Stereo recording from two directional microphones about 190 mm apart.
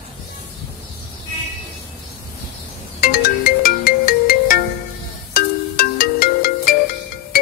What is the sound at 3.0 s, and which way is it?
Ringtone, 50° left (ahead or behind).